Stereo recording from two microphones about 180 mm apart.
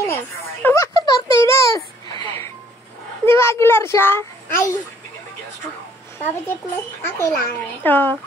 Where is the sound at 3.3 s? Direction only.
15° left (ahead or behind).